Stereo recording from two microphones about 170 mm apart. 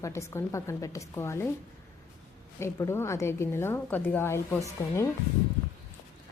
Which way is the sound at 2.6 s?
15° left (ahead or behind).